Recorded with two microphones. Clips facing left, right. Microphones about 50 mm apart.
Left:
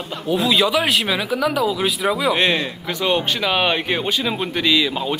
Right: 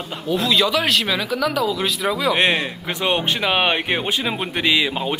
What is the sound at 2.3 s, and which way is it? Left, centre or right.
Speech, right.